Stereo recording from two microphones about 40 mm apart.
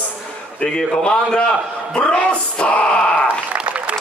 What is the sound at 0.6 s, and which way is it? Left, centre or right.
A man's voice, left.